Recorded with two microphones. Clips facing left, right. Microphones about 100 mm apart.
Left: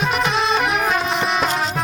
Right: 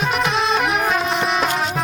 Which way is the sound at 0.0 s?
Centre (ahead or behind).